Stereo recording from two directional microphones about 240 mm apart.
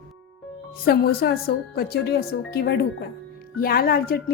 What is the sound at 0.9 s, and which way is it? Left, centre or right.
A woman's voice, left.